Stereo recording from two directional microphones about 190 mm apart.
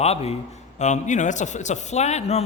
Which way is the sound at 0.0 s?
35° left (ahead or behind).